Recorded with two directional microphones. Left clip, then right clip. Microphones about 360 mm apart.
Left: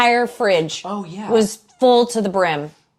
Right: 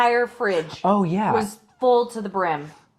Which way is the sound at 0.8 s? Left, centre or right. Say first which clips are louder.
Right 8 dB; right.